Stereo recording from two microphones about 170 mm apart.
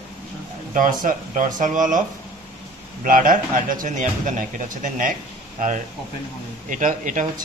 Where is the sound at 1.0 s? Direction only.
50° right (ahead or behind).